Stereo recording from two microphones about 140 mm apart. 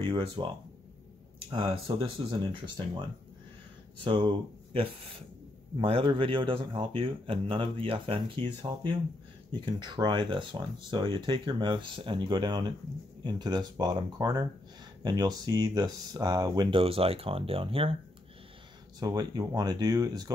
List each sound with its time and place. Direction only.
0.4 s speech: 35° right (ahead or behind)
4.0 s speech: 35° right (ahead or behind)
5.8 s speech: 40° right (ahead or behind)
16.8 s speech: 45° right (ahead or behind)
18.9 s speech: 30° right (ahead or behind)